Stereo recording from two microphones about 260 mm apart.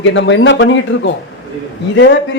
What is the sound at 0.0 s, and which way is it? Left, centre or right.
A man's voice, left.